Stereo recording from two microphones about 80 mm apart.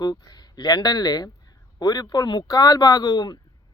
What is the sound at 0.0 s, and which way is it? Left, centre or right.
Speech, left.